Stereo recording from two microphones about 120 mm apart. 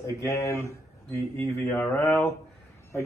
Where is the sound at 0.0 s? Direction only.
25° left (ahead or behind).